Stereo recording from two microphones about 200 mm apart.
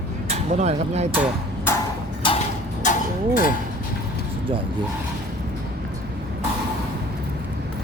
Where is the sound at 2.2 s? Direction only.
25° left (ahead or behind).